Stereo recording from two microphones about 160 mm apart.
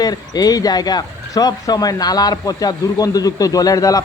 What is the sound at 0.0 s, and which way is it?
Speech, 25° left (ahead or behind).